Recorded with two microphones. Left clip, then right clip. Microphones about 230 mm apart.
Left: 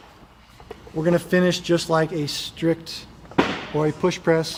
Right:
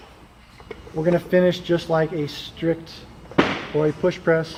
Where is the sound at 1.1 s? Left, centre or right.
Left.